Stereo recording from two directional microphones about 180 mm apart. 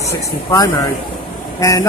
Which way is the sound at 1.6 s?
20° left (ahead or behind).